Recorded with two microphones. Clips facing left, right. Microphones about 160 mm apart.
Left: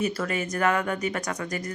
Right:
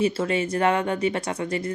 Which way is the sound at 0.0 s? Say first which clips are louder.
Right 5 dB; 30° right (ahead or behind).